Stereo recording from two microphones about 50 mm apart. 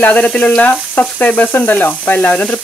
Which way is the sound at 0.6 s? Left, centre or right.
Left.